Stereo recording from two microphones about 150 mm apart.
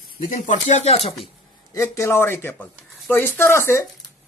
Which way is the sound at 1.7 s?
20° left (ahead or behind).